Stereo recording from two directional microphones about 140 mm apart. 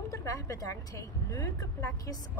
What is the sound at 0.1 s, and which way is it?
A woman's voice, 25° left (ahead or behind).